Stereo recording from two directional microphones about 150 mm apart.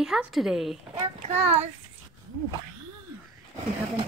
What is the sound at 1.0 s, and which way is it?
Speech, 45° right (ahead or behind).